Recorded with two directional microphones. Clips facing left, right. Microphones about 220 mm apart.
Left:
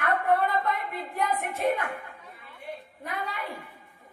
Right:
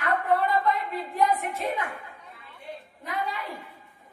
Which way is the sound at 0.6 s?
55° left (ahead or behind).